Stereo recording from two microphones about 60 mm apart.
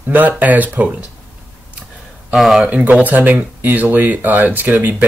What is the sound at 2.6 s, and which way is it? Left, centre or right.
Speech, right.